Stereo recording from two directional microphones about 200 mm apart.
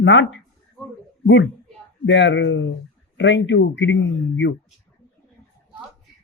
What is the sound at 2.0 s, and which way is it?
Speech, 65° left (ahead or behind).